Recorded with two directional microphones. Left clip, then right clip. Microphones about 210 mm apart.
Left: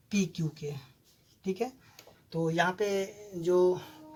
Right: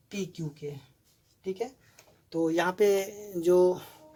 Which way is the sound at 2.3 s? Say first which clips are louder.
Right 2 dB; 45° right (ahead or behind).